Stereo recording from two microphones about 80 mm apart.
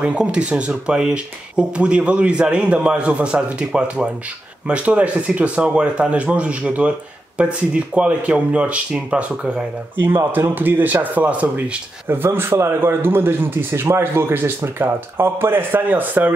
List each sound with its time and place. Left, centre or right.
0.0 s speech: centre
10.0 s speech: right